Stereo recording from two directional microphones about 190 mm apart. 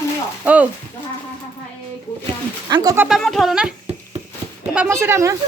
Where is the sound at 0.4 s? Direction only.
10° right (ahead or behind).